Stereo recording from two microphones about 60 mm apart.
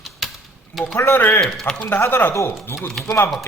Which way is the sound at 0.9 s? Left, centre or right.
Left.